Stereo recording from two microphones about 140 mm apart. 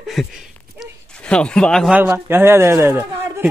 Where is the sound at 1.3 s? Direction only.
5° left (ahead or behind).